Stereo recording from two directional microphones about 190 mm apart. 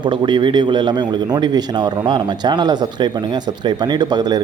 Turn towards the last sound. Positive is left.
turn(degrees=-20)  # may be behind; listen again after turning